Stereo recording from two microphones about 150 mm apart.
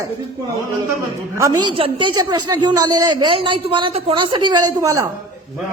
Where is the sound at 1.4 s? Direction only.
25° right (ahead or behind).